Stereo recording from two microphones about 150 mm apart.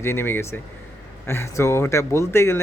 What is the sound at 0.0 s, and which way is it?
A man's voice, 15° left (ahead or behind).